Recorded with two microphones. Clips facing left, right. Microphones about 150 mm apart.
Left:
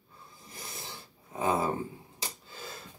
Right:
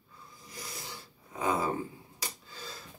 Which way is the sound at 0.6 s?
25° left (ahead or behind).